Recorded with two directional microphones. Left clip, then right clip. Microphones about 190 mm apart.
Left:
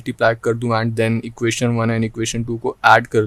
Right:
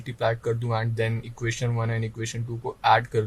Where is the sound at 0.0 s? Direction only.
60° left (ahead or behind).